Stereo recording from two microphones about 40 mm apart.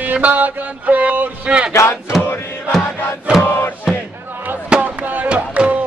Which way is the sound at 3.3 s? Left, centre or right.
Right.